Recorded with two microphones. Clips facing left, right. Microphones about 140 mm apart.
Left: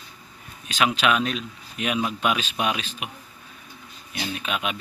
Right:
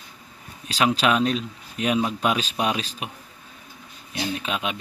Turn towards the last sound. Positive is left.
turn(degrees=-25)  # may be behind; listen again after turning